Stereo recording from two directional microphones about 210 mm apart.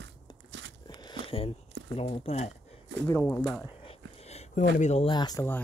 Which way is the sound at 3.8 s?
30° left (ahead or behind).